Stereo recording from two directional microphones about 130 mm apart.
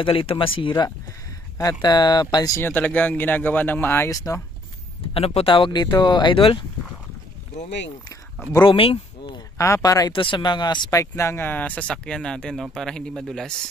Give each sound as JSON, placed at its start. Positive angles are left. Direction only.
{"t": 0.0, "sound": "speech", "side_deg": 45}
{"t": 2.6, "sound": "speech", "side_deg": 15}
{"t": 5.0, "sound": "speech", "side_deg": 50}
{"t": 8.1, "sound": "speech", "side_deg": 15}
{"t": 8.6, "sound": "speech", "side_deg": 45}
{"t": 9.6, "sound": "speech", "side_deg": 25}
{"t": 10.1, "sound": "a man's voice", "side_deg": 40}